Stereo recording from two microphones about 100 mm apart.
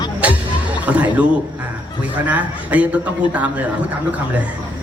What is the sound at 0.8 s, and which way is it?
A man's voice, 15° right (ahead or behind).